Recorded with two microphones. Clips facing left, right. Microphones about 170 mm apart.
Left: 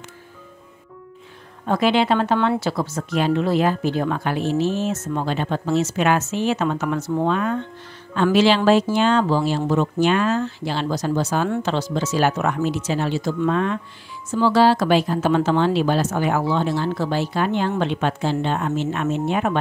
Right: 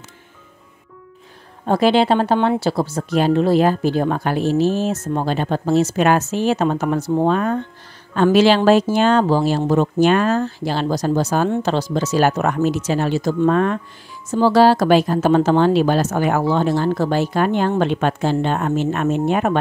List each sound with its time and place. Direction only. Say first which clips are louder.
1.7 s speech: right 3 dB; 35° right (ahead or behind)